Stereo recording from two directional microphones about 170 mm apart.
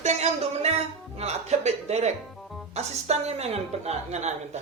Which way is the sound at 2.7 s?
40° right (ahead or behind).